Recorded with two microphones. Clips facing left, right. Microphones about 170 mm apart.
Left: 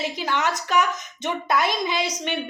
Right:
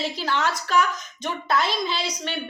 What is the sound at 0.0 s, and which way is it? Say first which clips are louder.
A woman's voice: even; 15° left (ahead or behind).